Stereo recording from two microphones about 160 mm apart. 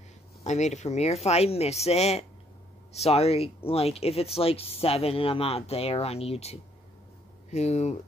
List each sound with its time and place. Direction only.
0.4 s speech: 45° left (ahead or behind)